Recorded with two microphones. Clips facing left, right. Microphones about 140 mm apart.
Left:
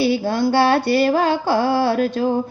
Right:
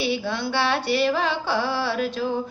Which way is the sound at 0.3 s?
40° left (ahead or behind).